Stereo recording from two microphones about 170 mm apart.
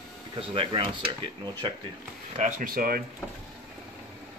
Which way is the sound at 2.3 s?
50° right (ahead or behind).